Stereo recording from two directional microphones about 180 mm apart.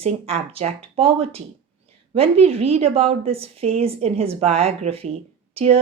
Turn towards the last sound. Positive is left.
turn(degrees=-35)  # may be behind; listen again after turning